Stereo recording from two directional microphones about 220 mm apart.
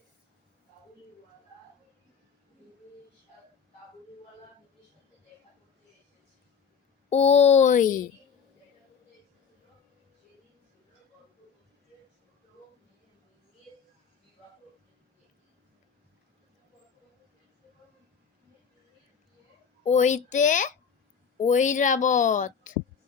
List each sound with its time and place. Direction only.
7.1 s a woman's voice: 30° left (ahead or behind)
19.8 s a woman's voice: 30° left (ahead or behind)